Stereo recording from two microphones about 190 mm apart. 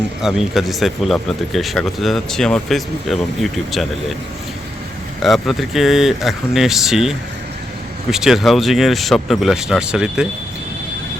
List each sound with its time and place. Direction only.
0.2 s speech: centre (ahead or behind)
5.2 s speech: centre (ahead or behind)